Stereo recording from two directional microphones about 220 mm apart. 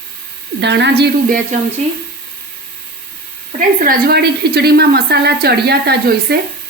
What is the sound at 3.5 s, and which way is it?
A woman's voice, 40° right (ahead or behind).